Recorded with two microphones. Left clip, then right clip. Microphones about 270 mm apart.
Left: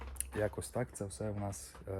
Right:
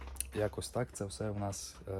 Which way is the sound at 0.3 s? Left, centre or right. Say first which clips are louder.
Right 1 dB; centre.